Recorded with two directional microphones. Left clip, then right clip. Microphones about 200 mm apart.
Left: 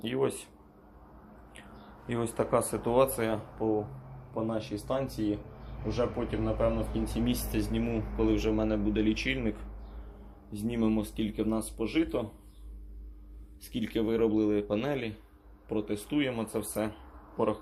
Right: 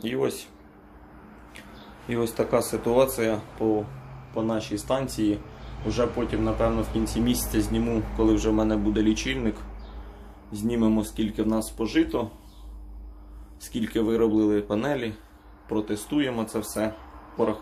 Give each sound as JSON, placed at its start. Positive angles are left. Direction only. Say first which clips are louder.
{"t": 0.0, "sound": "speech", "louder": "right 4 dB", "side_deg": -10}
{"t": 2.0, "sound": "speech", "louder": "right 5 dB", "side_deg": -10}
{"t": 13.6, "sound": "speech", "louder": "right 5 dB", "side_deg": -10}
{"t": 17.3, "sound": "a sound", "louder": "right 4 dB", "side_deg": -10}